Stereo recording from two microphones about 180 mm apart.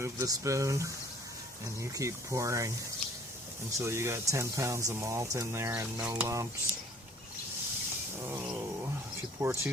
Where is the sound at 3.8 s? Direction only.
15° right (ahead or behind).